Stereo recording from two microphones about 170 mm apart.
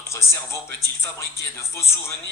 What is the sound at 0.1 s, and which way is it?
Speech, 15° left (ahead or behind).